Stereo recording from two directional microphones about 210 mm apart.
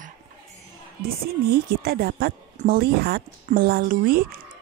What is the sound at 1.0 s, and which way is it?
A woman's voice, 45° right (ahead or behind).